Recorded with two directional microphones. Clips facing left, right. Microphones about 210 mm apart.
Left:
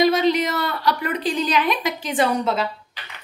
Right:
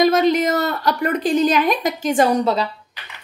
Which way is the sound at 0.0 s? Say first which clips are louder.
Right 3 dB; 45° right (ahead or behind).